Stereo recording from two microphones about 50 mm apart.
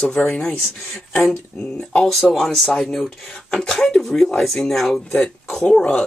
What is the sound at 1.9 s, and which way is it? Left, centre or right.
Speech, centre.